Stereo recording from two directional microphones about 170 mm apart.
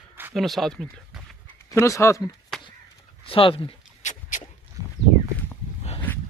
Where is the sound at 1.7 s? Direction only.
20° left (ahead or behind).